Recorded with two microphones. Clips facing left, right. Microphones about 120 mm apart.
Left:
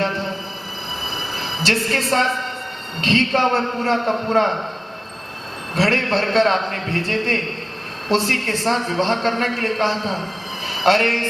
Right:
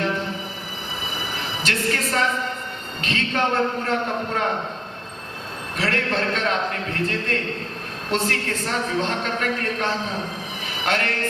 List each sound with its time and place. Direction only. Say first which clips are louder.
1.6 s a woman's voice: left 4 dB; 30° left (ahead or behind)
5.7 s a woman's voice: left 5 dB; 30° left (ahead or behind)
10.7 s a sound: left 8 dB; 30° left (ahead or behind)